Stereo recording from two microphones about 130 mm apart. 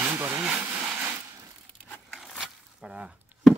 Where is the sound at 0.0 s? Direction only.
15° right (ahead or behind).